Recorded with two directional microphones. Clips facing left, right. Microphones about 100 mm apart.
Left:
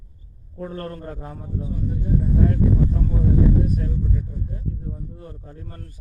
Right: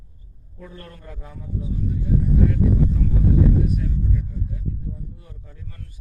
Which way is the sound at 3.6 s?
40° left (ahead or behind).